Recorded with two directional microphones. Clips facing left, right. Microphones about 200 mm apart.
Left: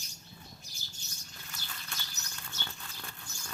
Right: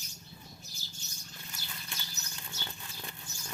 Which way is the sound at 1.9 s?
15° right (ahead or behind).